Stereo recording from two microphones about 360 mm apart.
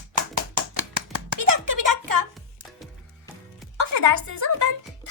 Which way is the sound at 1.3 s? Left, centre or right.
Right.